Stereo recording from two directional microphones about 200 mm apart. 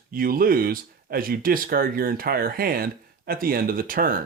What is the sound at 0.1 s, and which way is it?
Speech, 45° right (ahead or behind).